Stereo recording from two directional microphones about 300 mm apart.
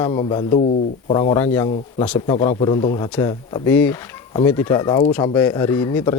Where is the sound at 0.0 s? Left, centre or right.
Centre.